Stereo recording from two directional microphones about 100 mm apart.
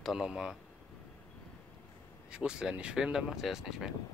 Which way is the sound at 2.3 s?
10° right (ahead or behind).